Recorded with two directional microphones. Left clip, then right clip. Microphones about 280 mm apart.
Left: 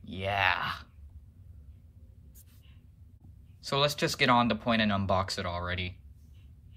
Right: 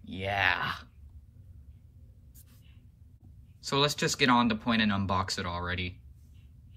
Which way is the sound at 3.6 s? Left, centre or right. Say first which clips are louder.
Even; centre.